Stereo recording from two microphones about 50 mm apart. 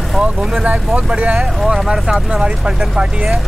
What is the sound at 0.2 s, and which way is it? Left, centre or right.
Vehicle, centre.